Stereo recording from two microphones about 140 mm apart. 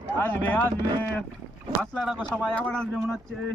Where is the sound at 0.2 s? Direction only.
15° left (ahead or behind).